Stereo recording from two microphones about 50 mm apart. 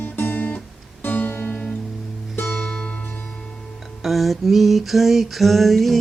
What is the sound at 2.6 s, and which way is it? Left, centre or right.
Music, left.